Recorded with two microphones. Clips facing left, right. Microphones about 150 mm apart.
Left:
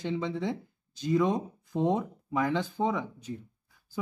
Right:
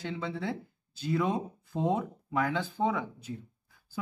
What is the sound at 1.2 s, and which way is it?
Speech, 10° right (ahead or behind).